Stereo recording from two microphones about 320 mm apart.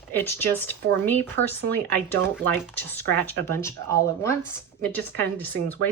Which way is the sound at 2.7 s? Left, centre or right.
Centre.